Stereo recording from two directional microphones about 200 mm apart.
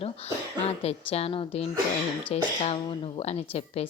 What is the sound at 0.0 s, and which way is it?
A woman's voice, 30° left (ahead or behind).